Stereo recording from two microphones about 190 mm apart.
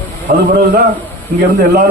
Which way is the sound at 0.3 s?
50° right (ahead or behind).